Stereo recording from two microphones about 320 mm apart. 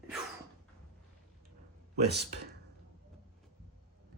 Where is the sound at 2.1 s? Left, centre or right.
Right.